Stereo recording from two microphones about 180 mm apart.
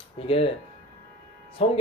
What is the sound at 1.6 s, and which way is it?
Speech, 35° left (ahead or behind).